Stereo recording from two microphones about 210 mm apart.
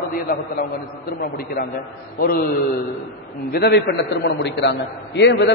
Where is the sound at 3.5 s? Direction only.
50° left (ahead or behind).